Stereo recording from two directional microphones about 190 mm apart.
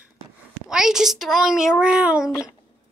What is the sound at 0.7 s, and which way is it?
A child's voice, 5° right (ahead or behind).